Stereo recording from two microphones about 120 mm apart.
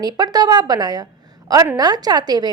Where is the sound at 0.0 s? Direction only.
35° right (ahead or behind).